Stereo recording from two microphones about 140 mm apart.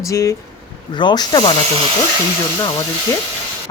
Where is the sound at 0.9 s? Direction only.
35° left (ahead or behind).